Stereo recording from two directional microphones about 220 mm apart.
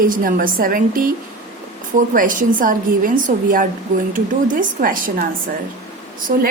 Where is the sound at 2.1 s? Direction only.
35° right (ahead or behind).